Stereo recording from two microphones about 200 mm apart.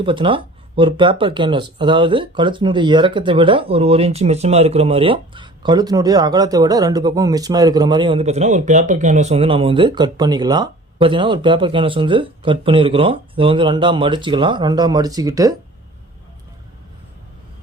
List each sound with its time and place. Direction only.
0.0 s speech: 25° right (ahead or behind)